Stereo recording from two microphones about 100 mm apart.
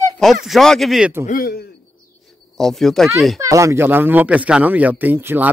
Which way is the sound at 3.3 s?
30° right (ahead or behind).